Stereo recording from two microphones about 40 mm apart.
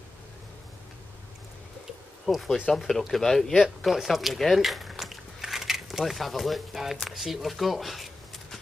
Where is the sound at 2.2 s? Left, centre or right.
Centre.